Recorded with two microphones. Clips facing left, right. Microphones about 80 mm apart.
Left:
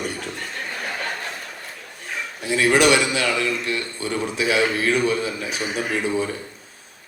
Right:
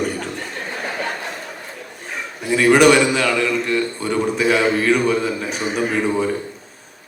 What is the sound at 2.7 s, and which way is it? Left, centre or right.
A man's voice, right.